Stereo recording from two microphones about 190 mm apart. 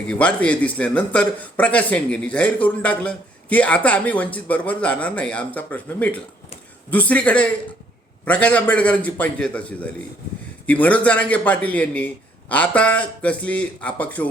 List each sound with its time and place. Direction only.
0.1 s speech: 5° left (ahead or behind)